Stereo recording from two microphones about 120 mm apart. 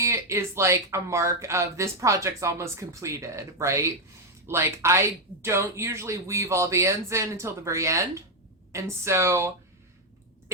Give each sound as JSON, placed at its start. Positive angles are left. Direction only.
{"t": 0.0, "sound": "speech", "side_deg": -25}